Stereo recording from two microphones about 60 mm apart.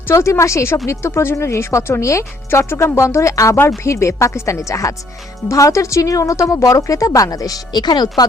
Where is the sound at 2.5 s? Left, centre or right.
Left.